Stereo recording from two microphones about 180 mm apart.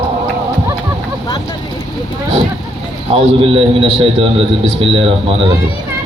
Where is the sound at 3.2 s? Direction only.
30° right (ahead or behind).